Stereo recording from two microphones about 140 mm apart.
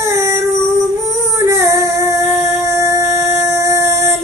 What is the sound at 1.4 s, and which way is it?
Music, 20° right (ahead or behind).